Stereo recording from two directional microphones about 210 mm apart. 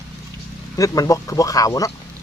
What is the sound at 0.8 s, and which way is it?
Speech, 15° left (ahead or behind).